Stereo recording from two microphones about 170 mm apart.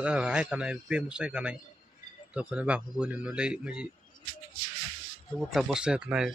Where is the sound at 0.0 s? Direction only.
5° right (ahead or behind).